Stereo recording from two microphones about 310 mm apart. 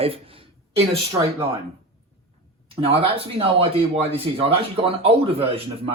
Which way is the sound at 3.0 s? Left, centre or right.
Centre.